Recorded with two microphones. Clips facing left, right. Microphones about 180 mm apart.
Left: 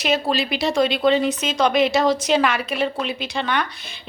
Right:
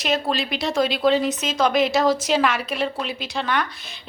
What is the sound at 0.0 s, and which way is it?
A woman's voice, centre (ahead or behind).